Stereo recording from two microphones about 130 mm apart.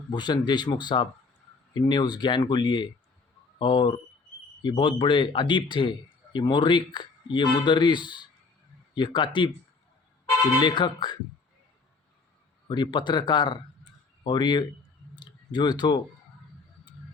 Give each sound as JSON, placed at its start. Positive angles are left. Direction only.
{"t": 0.1, "sound": "a man's voice", "side_deg": 35}
{"t": 10.6, "sound": "a man's voice", "side_deg": 35}
{"t": 12.6, "sound": "a man's voice", "side_deg": 35}
{"t": 15.1, "sound": "a sound", "side_deg": 35}